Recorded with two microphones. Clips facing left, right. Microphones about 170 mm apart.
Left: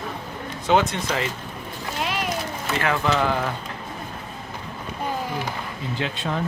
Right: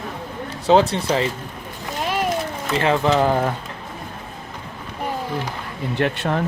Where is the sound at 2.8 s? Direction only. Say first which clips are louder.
Right 5 dB; 25° right (ahead or behind).